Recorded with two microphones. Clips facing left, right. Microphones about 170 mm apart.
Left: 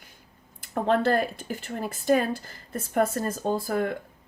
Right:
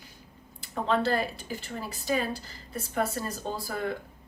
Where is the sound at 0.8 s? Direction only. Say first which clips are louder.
Left 4 dB; 50° left (ahead or behind).